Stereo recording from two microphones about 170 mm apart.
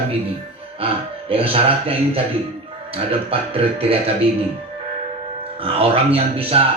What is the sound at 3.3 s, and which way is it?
Speech, 35° right (ahead or behind).